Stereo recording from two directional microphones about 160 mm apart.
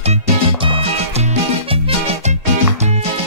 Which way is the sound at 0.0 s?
35° right (ahead or behind).